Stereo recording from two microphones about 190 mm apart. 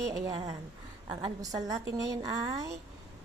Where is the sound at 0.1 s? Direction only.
20° right (ahead or behind).